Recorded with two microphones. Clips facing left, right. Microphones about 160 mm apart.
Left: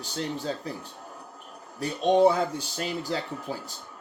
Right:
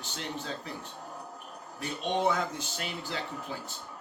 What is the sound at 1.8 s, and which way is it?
Speech, 35° left (ahead or behind).